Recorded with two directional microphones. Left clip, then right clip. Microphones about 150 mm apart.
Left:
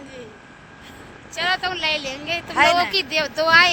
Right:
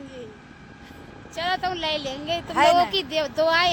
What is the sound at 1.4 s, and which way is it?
Speech, 20° left (ahead or behind).